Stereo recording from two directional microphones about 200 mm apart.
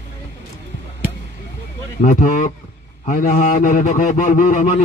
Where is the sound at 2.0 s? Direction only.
40° left (ahead or behind).